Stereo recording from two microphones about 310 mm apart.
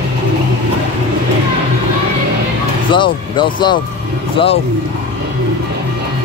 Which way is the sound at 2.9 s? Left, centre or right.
Centre.